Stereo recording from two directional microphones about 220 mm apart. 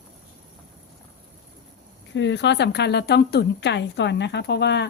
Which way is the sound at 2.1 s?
55° left (ahead or behind).